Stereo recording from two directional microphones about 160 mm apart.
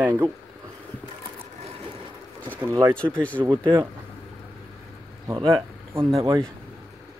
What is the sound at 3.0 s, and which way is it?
Speech, 5° left (ahead or behind).